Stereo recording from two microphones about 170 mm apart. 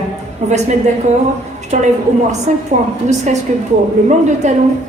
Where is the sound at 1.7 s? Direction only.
45° right (ahead or behind).